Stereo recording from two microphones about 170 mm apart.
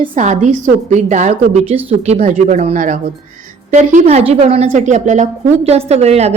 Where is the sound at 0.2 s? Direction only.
45° right (ahead or behind).